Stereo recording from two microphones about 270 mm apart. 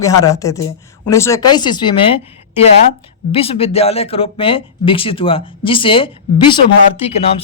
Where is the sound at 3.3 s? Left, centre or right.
Left.